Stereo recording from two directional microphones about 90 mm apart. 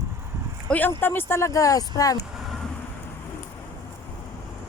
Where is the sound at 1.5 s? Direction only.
40° left (ahead or behind).